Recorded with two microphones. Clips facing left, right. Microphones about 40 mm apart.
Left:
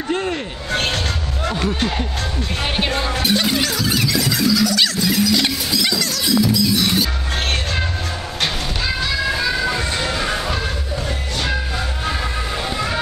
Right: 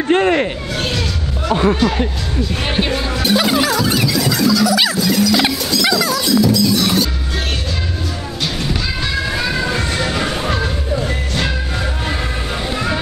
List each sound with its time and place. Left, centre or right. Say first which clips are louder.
0.1 s speech: right 9 dB; right
1.5 s speech: right 8 dB; right
3.0 s music: right 3 dB; centre
5.0 s music: right 3 dB; centre
5.9 s music: right 5 dB; centre
6.2 s music: right 1 dB; centre
10.1 s a sound: right 2 dB; right